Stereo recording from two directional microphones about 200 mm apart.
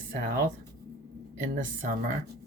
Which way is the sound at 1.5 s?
40° right (ahead or behind).